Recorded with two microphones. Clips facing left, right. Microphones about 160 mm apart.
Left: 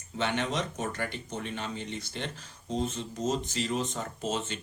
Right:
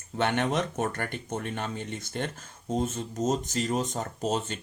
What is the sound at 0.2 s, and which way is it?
Speech, 55° right (ahead or behind).